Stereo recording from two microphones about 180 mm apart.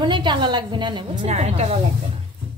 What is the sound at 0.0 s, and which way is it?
A woman's voice, 25° right (ahead or behind).